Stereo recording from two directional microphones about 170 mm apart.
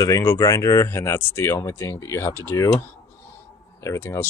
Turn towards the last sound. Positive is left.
turn(degrees=15)  # may be behind; listen again after turning